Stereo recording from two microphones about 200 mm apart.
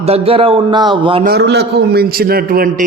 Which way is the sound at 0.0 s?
30° right (ahead or behind).